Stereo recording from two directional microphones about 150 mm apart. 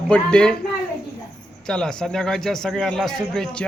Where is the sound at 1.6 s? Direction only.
5° left (ahead or behind).